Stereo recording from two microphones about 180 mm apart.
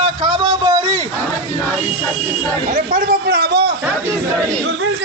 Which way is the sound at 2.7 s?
50° right (ahead or behind).